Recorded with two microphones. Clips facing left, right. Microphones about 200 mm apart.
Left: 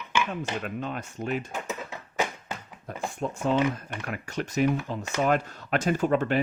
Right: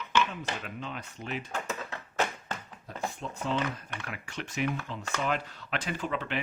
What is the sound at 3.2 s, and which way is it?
Speech, 50° left (ahead or behind).